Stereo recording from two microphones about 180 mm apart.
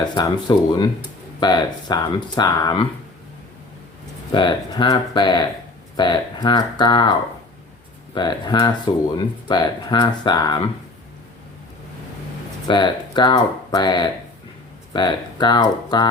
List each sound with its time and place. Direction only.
0.0 s speech: 25° left (ahead or behind)
4.4 s speech: 25° left (ahead or behind)
8.1 s speech: 25° left (ahead or behind)
12.6 s speech: 25° left (ahead or behind)